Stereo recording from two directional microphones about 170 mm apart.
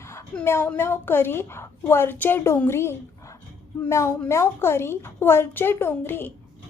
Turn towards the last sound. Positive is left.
turn(degrees=10)  # may be behind; listen again after turning